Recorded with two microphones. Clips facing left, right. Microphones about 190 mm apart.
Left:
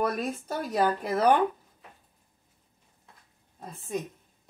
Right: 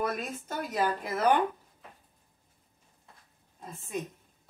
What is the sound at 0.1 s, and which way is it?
Speech, 35° left (ahead or behind).